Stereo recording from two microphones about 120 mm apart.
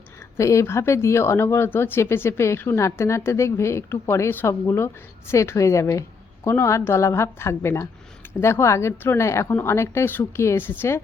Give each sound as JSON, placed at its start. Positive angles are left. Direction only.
{"t": 0.3, "sound": "a woman's voice", "side_deg": 25}